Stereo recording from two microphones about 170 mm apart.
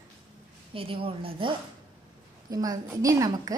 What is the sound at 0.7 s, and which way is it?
Speech, 30° right (ahead or behind).